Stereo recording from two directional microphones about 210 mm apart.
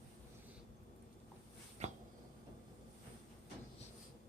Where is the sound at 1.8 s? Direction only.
35° right (ahead or behind).